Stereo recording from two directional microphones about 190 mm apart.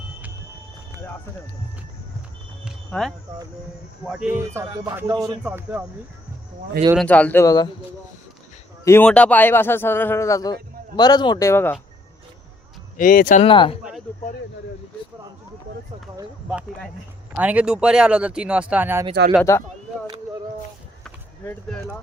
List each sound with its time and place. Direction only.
2.6 s speech: centre (ahead or behind); by 5.4 s 20° right (ahead or behind)
5.4 s speech: 10° right (ahead or behind)
6.9 s speech: 5° left (ahead or behind)
8.8 s speech: 10° left (ahead or behind)
13.0 s speech: 45° left (ahead or behind)
13.5 s speech: 25° left (ahead or behind)
16.5 s speech: centre (ahead or behind)
19.5 s speech: 15° left (ahead or behind)
21.0 s a sound: 10° left (ahead or behind)